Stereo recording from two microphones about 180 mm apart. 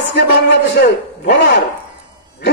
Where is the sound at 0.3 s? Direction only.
65° left (ahead or behind).